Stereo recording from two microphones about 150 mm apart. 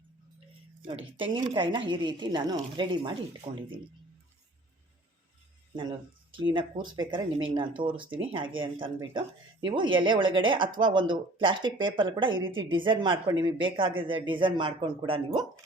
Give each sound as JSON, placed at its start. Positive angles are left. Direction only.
{"t": 0.9, "sound": "speech", "side_deg": -35}
{"t": 6.3, "sound": "speech", "side_deg": -35}